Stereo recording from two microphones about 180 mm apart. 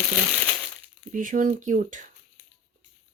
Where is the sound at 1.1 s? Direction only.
50° right (ahead or behind).